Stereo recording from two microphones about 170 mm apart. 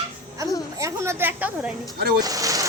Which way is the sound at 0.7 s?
15° right (ahead or behind).